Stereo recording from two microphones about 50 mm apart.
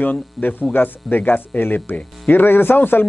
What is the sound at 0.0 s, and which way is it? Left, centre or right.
A man's voice, left.